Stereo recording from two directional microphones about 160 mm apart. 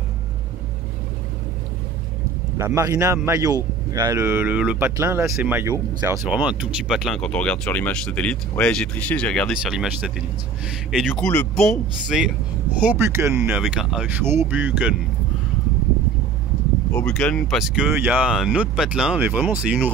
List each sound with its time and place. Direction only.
2.5 s speech: 20° right (ahead or behind)
6.2 s speech: 5° right (ahead or behind)
12.8 s speech: 15° right (ahead or behind)
14.2 s speech: 15° right (ahead or behind)
16.9 s speech: 5° left (ahead or behind)